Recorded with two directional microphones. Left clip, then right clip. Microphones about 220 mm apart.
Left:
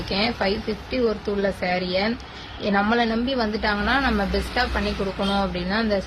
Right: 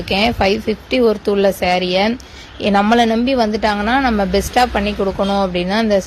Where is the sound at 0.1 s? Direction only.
35° right (ahead or behind).